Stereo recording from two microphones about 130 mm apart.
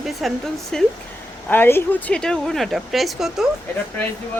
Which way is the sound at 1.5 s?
15° left (ahead or behind).